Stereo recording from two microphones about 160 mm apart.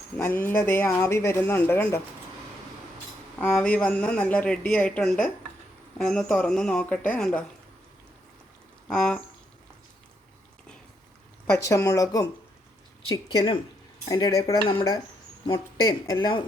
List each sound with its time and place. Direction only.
0.2 s a woman's voice: 10° left (ahead or behind)
3.5 s a woman's voice: 5° left (ahead or behind)
8.9 s a woman's voice: 5° left (ahead or behind)
11.5 s cutlery: 20° left (ahead or behind)
13.0 s speech: 30° left (ahead or behind)
14.1 s cutlery: 20° left (ahead or behind)